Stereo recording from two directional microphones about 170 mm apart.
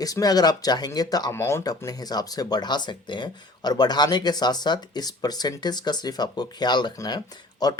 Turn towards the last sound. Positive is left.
turn(degrees=25)  # may be behind; listen again after turning